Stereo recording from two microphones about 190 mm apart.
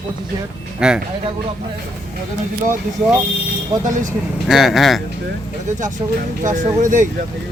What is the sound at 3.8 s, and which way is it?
Speech, 40° right (ahead or behind).